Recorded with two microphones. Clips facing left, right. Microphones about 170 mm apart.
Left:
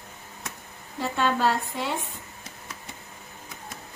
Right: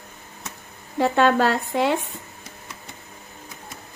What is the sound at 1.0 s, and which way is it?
Speech, 75° right (ahead or behind).